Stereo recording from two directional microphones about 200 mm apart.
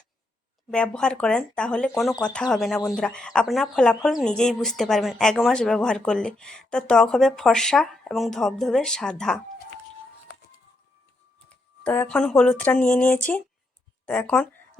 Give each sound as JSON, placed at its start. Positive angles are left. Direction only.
{"t": 0.7, "sound": "speech", "side_deg": 5}
{"t": 11.4, "sound": "speech", "side_deg": 5}